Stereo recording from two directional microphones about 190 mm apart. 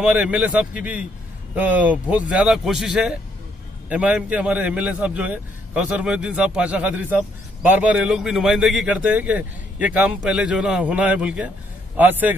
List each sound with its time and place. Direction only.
0.0 s a man's voice: 5° right (ahead or behind)